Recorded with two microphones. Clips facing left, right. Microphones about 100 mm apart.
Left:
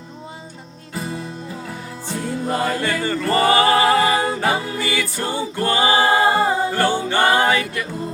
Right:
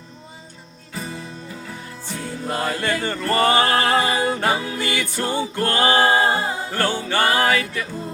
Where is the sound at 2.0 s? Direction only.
10° left (ahead or behind).